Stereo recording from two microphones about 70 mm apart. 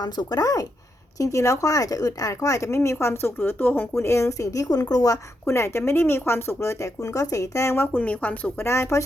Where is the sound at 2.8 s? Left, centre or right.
Left.